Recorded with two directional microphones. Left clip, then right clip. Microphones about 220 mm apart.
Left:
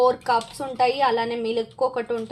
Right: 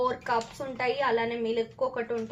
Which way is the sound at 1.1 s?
55° left (ahead or behind).